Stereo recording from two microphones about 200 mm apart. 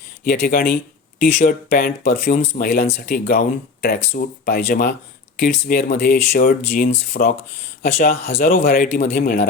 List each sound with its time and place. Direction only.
0.3 s speech: 45° left (ahead or behind)
8.4 s speech: 45° left (ahead or behind)